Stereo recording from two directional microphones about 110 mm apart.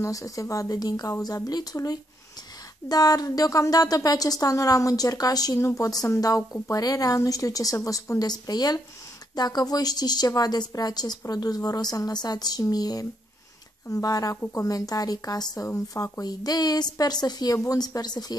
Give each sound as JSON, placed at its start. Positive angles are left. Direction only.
{"t": 0.0, "sound": "a woman's voice", "side_deg": 30}